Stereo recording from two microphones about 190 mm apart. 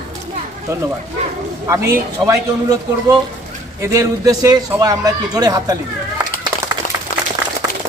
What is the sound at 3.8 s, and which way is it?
Speech, 15° right (ahead or behind).